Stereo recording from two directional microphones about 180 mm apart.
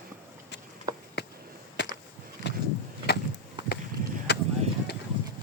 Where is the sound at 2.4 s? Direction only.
70° left (ahead or behind).